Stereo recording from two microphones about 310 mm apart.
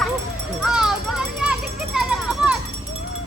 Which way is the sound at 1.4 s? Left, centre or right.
Centre.